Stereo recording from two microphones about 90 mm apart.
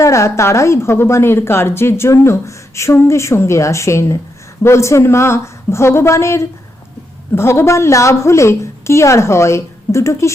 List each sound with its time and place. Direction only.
0.0 s a woman's voice: 35° left (ahead or behind)